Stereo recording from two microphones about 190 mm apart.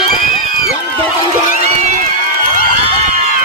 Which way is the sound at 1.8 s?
40° right (ahead or behind).